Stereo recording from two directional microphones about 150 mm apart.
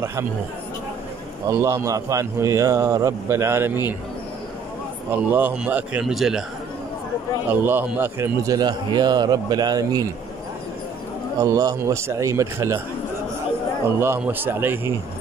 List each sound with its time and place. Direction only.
1.5 s a man's voice: 20° right (ahead or behind)
5.1 s speech: 10° right (ahead or behind)
7.6 s a man's voice: 10° right (ahead or behind)
11.4 s a man's voice: 20° right (ahead or behind)
13.9 s speech: 15° right (ahead or behind)